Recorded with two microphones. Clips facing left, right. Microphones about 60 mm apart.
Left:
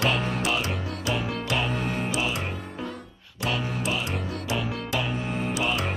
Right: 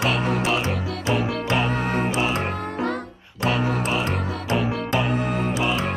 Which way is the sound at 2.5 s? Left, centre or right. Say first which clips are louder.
Right 9 dB; right.